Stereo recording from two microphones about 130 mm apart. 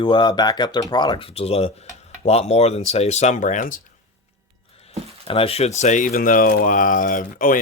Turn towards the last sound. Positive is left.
turn(degrees=90)